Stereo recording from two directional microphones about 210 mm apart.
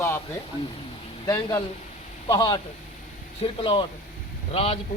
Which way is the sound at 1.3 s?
15° left (ahead or behind).